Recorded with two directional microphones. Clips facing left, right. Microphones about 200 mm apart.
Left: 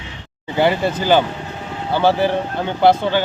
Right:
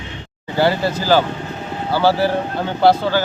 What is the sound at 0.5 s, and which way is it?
Speech, 20° left (ahead or behind).